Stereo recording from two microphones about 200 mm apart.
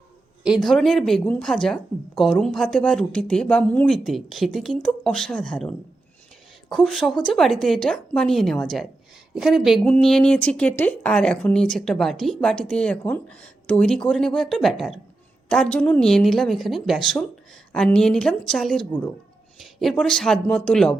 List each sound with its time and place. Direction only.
0.4 s speech: centre (ahead or behind)